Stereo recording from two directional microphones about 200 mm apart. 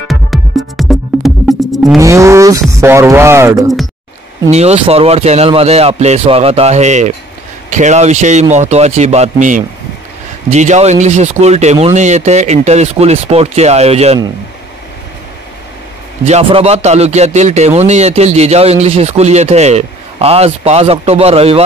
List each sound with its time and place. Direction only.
0.1 s music: centre (ahead or behind)
2.0 s speech: 15° right (ahead or behind)
4.5 s speech: 35° right (ahead or behind)
16.3 s speech: 30° right (ahead or behind)